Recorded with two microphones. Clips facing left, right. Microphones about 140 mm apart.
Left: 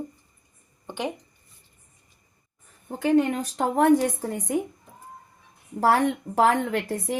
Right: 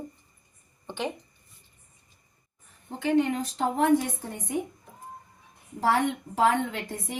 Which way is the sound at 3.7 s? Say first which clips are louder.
Left 4 dB; 50° left (ahead or behind).